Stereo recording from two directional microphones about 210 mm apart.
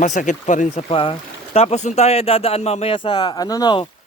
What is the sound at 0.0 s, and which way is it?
Speech, 35° left (ahead or behind).